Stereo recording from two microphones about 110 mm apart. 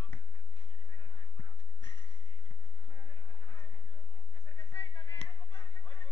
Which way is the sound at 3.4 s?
20° left (ahead or behind).